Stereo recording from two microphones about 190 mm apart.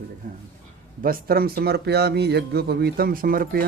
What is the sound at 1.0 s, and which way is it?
Speech, 50° right (ahead or behind).